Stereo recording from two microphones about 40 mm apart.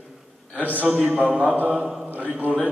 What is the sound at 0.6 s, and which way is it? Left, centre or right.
Speech, right.